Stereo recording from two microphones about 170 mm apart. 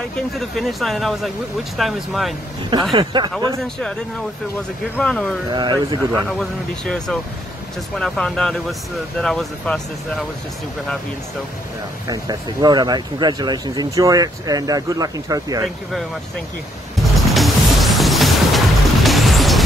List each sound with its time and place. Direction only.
0.6 s speech: centre (ahead or behind)
2.7 s speech: 25° right (ahead or behind)
4.9 s speech: 5° left (ahead or behind)
5.5 s speech: 25° right (ahead or behind)
6.8 s speech: 5° left (ahead or behind)
12.1 s speech: 25° right (ahead or behind)
17.3 s music: centre (ahead or behind)